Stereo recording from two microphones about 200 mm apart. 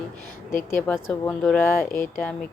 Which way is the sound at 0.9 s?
Centre (ahead or behind).